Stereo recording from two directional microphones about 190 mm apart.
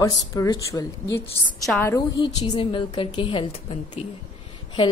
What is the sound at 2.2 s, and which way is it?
A woman's voice, 25° left (ahead or behind).